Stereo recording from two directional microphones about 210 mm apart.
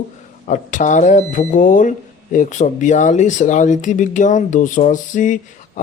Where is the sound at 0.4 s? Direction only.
35° left (ahead or behind).